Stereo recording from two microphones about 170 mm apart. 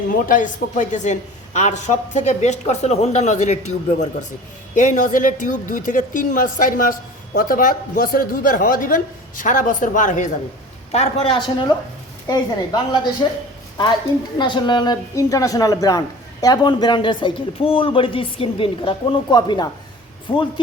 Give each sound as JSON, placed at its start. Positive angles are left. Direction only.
{"t": 0.1, "sound": "speech", "side_deg": 50}
{"t": 10.9, "sound": "a man's voice", "side_deg": 35}
{"t": 14.3, "sound": "a woman's voice", "side_deg": 25}